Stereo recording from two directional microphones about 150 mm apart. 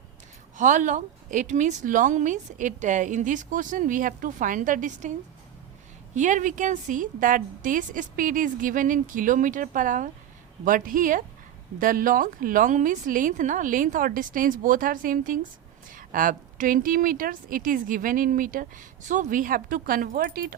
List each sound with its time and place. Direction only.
0.5 s a woman's voice: 60° right (ahead or behind)
6.1 s a woman's voice: 55° right (ahead or behind); by 20.6 s 75° right (ahead or behind)